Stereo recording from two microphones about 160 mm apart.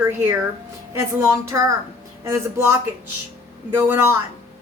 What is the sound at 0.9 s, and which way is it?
A woman's voice, 20° right (ahead or behind).